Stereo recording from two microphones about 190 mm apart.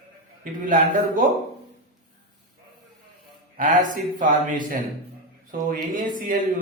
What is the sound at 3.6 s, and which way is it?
A man's voice, 45° right (ahead or behind).